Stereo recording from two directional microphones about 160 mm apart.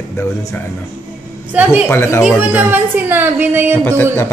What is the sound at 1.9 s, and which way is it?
Speech, 15° left (ahead or behind).